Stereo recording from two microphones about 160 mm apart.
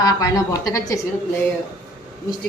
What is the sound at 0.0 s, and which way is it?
Speech, 25° left (ahead or behind).